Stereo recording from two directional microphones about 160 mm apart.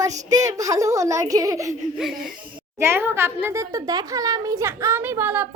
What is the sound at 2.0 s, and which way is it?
Speech, centre (ahead or behind).